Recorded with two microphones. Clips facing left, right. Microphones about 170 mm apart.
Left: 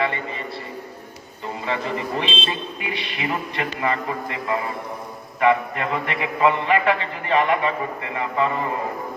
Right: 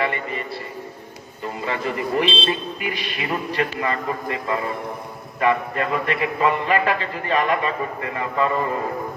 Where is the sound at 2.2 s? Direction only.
35° right (ahead or behind).